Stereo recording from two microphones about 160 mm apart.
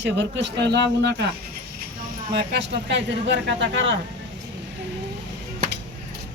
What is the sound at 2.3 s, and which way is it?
Speech, 90° right.